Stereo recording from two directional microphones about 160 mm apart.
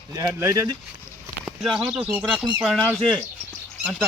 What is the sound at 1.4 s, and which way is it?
Speech, centre (ahead or behind).